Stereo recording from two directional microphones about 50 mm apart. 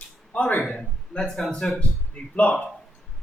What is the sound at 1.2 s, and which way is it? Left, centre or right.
Speech, centre.